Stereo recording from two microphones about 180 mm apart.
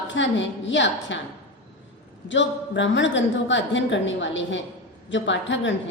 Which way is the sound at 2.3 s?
85° left.